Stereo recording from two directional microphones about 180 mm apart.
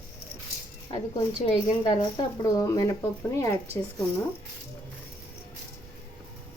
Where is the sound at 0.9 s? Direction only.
25° left (ahead or behind).